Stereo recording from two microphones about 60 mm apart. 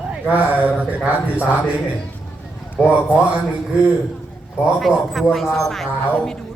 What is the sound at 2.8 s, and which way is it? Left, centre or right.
Speech, right.